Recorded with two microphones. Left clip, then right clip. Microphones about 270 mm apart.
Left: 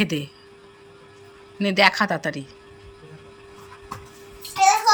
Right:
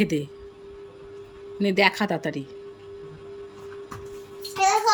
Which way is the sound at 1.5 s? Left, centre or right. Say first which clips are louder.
Left 3 dB; centre.